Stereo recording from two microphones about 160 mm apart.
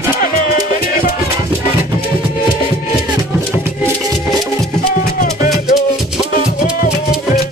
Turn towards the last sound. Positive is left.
turn(degrees=65)  # may be behind; listen again after turning